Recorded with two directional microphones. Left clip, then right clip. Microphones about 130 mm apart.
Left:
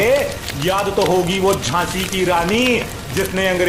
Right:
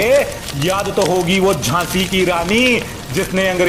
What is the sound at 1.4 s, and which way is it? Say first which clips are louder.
Speech: right 1 dB; 45° right (ahead or behind).